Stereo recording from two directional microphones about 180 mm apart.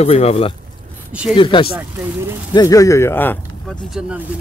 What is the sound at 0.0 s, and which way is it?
Speech, 35° left (ahead or behind).